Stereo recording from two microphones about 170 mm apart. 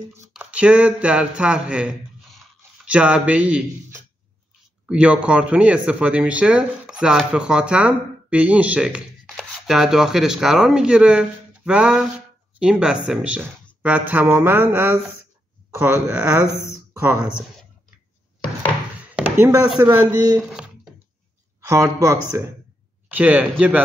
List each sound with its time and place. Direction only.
0.3 s speech: 5° right (ahead or behind)
4.8 s speech: 5° right (ahead or behind)
19.4 s speech: 15° right (ahead or behind)
20.3 s a sound: 5° right (ahead or behind)
21.5 s speech: 20° right (ahead or behind)